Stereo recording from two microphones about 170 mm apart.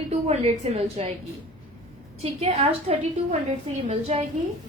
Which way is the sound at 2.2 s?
40° right (ahead or behind).